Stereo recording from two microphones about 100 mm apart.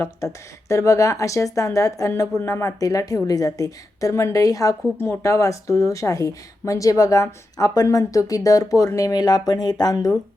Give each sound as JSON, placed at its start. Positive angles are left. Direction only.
{"t": 0.7, "sound": "speech", "side_deg": 30}